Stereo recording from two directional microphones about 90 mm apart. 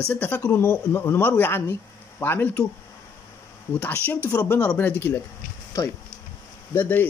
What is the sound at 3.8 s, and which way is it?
Speech, 20° left (ahead or behind).